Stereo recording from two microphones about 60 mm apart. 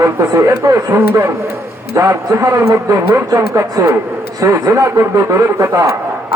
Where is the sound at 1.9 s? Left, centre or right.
Right.